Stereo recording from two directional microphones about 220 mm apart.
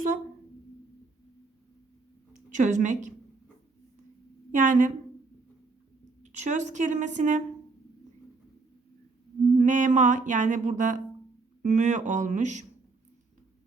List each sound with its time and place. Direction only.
2.5 s music: 35° right (ahead or behind)
4.5 s music: 35° right (ahead or behind)
6.2 s music: 35° right (ahead or behind)
9.6 s music: 35° right (ahead or behind)